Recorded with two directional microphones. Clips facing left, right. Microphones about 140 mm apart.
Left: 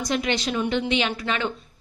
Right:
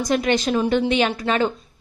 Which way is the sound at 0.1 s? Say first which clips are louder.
Right 5 dB; 45° right (ahead or behind).